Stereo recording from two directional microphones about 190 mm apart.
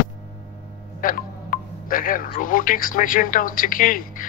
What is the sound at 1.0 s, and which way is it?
Speech, 50° left (ahead or behind).